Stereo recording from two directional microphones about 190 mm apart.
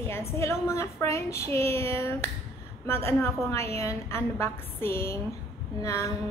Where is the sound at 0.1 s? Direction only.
15° left (ahead or behind).